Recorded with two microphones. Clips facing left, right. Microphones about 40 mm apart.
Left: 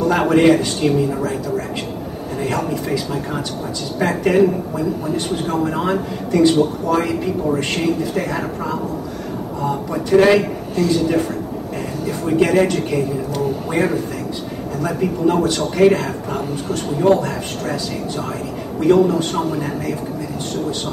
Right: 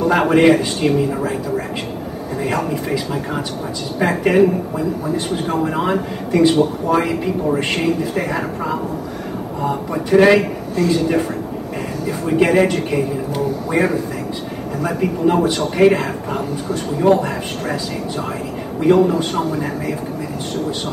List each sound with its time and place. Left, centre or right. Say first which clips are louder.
0.0 s speech: right 1 dB; centre
2.4 s speech: right 1 dB; centre
14.8 s speech: even; centre
18.8 s speech: even; centre